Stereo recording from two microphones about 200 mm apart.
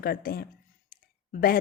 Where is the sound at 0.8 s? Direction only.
45° left (ahead or behind).